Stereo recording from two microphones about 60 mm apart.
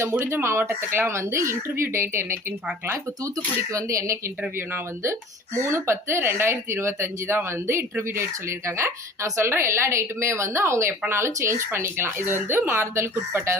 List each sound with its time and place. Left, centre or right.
0.3 s speech: right
3.3 s speech: right
4.5 s speech: right
5.5 s speech: right